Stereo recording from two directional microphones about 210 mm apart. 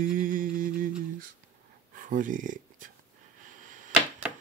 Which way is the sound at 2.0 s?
40° right (ahead or behind).